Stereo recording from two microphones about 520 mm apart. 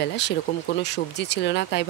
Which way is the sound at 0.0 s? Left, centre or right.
Centre.